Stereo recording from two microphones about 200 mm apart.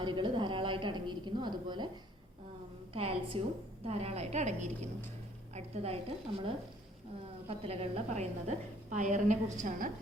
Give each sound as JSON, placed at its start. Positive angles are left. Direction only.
{"t": 0.0, "sound": "a woman's voice", "side_deg": -25}
{"t": 2.9, "sound": "a woman's voice", "side_deg": -25}